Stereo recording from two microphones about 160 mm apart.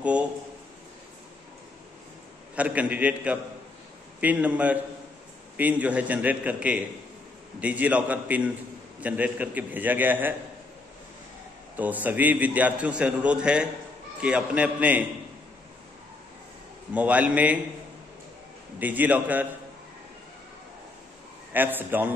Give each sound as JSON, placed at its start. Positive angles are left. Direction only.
{"t": 2.5, "sound": "a man's voice", "side_deg": -10}
{"t": 11.7, "sound": "a man's voice", "side_deg": -10}
{"t": 16.9, "sound": "a man's voice", "side_deg": -10}
{"t": 18.8, "sound": "a man's voice", "side_deg": -10}
{"t": 21.5, "sound": "a man's voice", "side_deg": -10}